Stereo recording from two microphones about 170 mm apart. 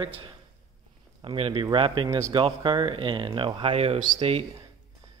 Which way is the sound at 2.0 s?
15° right (ahead or behind).